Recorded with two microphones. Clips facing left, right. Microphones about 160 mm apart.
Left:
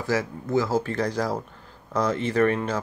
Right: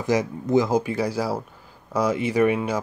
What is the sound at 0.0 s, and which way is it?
Speech, 20° right (ahead or behind).